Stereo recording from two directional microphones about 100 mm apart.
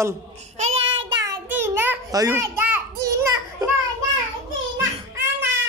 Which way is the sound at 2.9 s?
35° right (ahead or behind).